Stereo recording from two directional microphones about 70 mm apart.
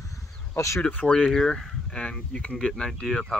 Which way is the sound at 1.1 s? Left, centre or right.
Centre.